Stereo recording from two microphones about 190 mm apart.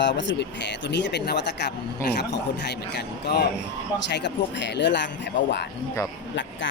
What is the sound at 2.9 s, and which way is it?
Speech, 60° left (ahead or behind).